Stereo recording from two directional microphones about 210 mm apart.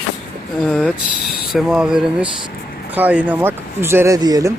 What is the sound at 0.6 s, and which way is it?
Speech, centre (ahead or behind).